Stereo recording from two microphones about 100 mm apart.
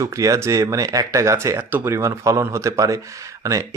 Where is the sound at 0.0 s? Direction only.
35° right (ahead or behind).